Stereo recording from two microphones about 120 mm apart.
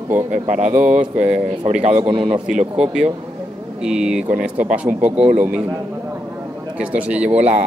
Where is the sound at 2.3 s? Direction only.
90° right.